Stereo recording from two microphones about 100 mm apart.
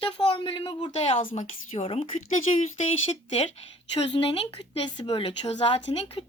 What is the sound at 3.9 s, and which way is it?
Speech, 65° left (ahead or behind).